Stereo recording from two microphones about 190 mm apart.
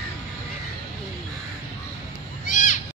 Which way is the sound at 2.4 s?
45° left (ahead or behind).